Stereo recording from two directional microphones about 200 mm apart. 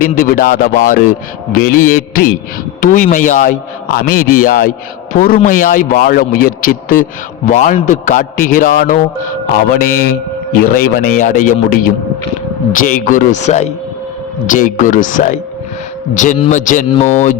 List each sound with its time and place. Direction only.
0.2 s a man's voice: 45° left (ahead or behind)